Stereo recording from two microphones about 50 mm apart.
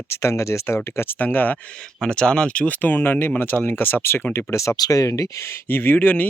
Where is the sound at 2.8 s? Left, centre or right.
Left.